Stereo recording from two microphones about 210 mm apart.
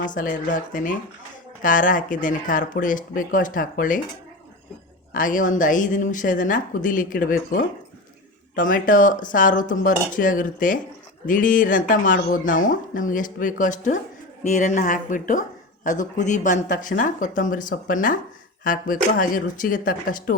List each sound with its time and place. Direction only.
0.0 s speech: 40° left (ahead or behind)
5.1 s speech: 40° left (ahead or behind)